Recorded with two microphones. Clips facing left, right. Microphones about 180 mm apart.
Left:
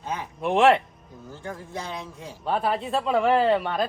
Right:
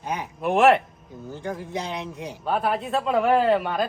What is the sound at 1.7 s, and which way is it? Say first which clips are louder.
Speech: right 4 dB; 20° right (ahead or behind).